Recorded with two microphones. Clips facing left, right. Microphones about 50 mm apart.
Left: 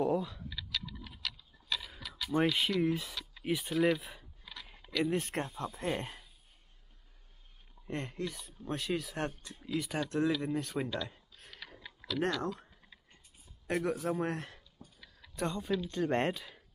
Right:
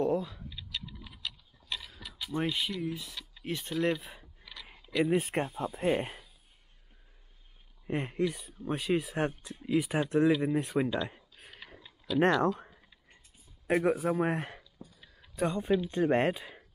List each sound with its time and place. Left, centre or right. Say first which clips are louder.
0.0 s typing: right 2 dB; centre
2.3 s speech: left 3 dB; left
3.4 s speech: left 1 dB; centre
5.0 s speech: right 5 dB; centre
7.8 s speech: right 7 dB; centre
11.1 s a sound: right 5 dB; right
12.1 s speech: right 8 dB; right
13.7 s speech: right 5 dB; right
14.8 s a sound: right 3 dB; centre
15.5 s speech: right 7 dB; right